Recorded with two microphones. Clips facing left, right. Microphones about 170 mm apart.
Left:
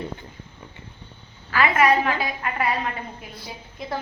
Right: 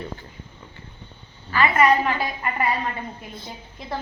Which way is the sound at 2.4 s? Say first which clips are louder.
Even; centre (ahead or behind).